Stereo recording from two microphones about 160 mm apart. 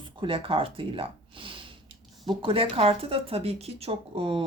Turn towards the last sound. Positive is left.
turn(degrees=-35)  # may be behind; listen again after turning